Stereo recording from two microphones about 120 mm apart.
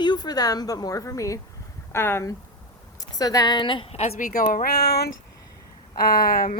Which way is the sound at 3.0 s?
30° left (ahead or behind).